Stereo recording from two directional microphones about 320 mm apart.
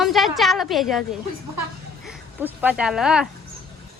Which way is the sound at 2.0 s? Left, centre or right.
Centre.